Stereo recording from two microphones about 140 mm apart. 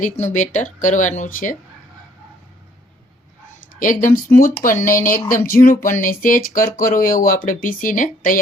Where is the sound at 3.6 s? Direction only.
70° left (ahead or behind).